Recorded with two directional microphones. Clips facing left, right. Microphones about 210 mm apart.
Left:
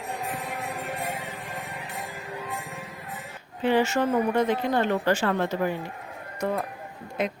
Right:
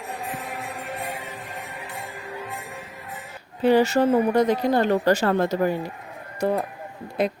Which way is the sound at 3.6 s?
40° right (ahead or behind).